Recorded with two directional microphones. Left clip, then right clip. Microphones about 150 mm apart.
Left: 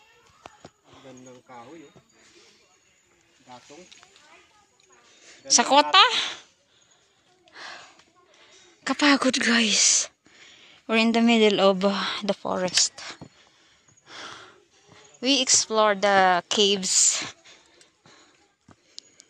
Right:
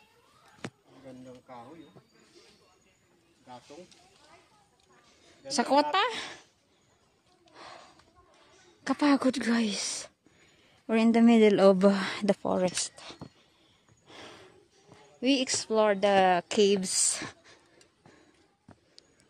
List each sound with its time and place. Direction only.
3.4 s speech: 30° left (ahead or behind)
5.5 s speech: 15° right (ahead or behind)
7.5 s a sound: 10° right (ahead or behind)
8.8 s speech: 10° right (ahead or behind); by 12.7 s 35° right (ahead or behind)
12.8 s speech: 15° right (ahead or behind)
14.0 s snort: 10° right (ahead or behind)
15.1 s a woman's voice: 10° right (ahead or behind); by 17.6 s 30° right (ahead or behind)